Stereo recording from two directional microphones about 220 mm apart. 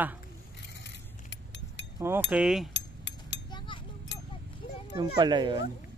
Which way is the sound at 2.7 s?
55° left (ahead or behind).